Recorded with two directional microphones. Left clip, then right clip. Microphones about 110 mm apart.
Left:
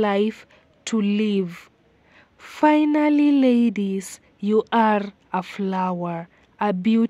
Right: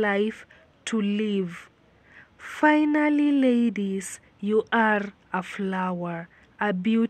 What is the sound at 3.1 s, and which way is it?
Speech, 50° left (ahead or behind).